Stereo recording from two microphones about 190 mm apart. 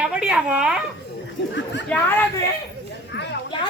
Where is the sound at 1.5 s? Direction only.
70° left (ahead or behind).